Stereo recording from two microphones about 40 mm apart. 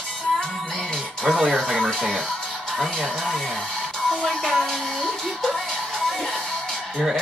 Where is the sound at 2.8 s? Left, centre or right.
Centre.